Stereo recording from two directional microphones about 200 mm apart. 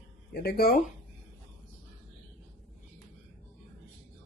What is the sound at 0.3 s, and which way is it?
Speech, 50° left (ahead or behind).